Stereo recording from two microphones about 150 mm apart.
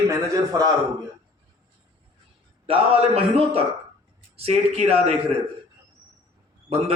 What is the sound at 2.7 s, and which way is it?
A man's voice, 40° right (ahead or behind).